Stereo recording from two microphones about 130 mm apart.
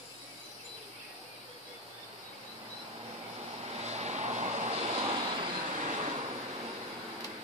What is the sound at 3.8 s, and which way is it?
Vehicle, 60° right (ahead or behind).